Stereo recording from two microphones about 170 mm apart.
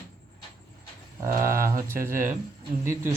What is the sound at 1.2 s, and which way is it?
Speech, 15° right (ahead or behind).